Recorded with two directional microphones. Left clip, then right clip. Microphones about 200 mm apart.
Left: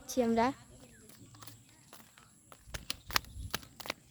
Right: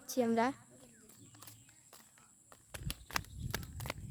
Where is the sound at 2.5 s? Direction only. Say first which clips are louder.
Left 5 dB; 25° left (ahead or behind).